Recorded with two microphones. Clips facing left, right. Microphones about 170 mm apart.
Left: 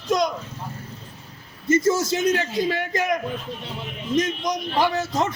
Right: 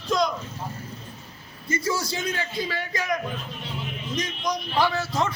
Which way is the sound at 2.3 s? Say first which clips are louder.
Left 7 dB; 45° left (ahead or behind).